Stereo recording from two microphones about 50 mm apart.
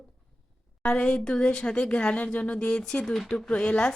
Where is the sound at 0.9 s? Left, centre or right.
Centre.